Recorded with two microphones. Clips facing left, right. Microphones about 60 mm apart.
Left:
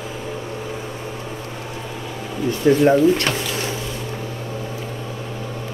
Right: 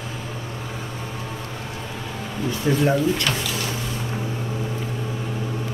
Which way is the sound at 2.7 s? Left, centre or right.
Left.